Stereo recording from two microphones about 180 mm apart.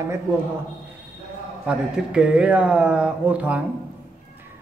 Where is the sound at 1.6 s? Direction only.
5° right (ahead or behind).